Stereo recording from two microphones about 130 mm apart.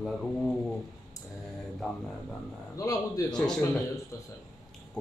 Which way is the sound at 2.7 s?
25° left (ahead or behind).